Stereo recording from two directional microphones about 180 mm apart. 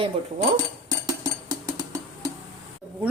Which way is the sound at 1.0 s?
20° right (ahead or behind).